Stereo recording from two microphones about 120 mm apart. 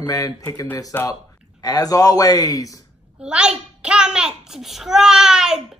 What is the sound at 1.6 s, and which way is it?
Speech, 30° left (ahead or behind).